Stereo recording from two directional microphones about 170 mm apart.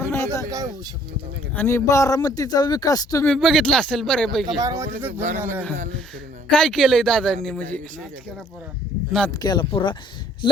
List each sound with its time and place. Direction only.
0.0 s a sound: 15° left (ahead or behind)
0.4 s a sound: 20° right (ahead or behind)
1.5 s speech: 15° left (ahead or behind)
3.2 s speech: centre (ahead or behind)
4.6 s speech: 15° right (ahead or behind)
6.5 s a man's voice: 5° left (ahead or behind)
9.4 s speech: 25° left (ahead or behind)